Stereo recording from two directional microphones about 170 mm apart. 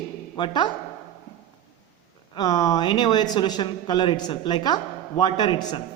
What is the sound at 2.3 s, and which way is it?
Speech, 25° left (ahead or behind).